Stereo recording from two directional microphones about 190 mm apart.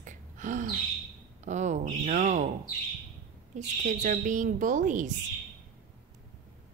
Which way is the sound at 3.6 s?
40° right (ahead or behind).